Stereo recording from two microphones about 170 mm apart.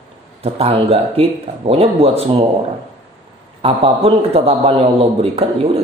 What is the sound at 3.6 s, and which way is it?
A man's voice, 35° right (ahead or behind).